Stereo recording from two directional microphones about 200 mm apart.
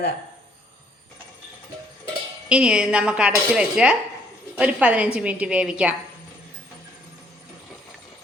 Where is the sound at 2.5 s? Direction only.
5° right (ahead or behind).